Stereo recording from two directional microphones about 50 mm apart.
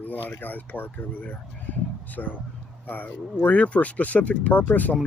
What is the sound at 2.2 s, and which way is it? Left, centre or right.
Speech, left.